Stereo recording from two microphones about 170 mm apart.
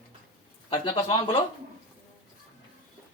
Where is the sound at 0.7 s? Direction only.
30° left (ahead or behind).